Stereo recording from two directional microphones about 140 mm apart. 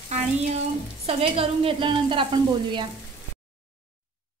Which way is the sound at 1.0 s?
40° right (ahead or behind).